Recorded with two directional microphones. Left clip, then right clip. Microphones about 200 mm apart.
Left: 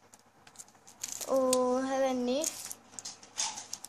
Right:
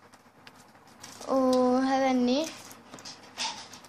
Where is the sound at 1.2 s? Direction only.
20° left (ahead or behind).